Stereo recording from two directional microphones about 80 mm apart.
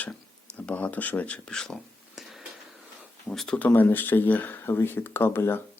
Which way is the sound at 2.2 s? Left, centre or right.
Centre.